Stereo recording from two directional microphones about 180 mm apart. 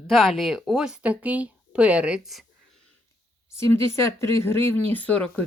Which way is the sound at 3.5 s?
15° left (ahead or behind).